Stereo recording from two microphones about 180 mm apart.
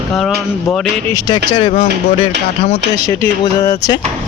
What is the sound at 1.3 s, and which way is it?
Speech, 25° left (ahead or behind).